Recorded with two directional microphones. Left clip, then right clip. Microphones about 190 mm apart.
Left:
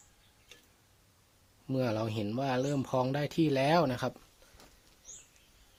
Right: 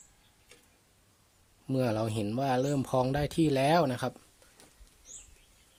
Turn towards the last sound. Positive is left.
turn(degrees=-10)  # may be behind; listen again after turning